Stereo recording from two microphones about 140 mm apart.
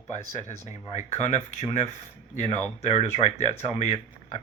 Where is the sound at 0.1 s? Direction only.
55° left (ahead or behind).